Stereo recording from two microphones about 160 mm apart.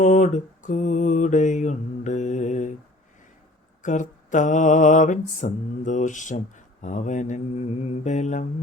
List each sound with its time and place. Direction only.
0.0 s mantra: 50° left (ahead or behind)
3.8 s mantra: 50° left (ahead or behind)